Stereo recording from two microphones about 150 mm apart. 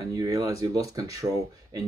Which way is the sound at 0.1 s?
25° right (ahead or behind).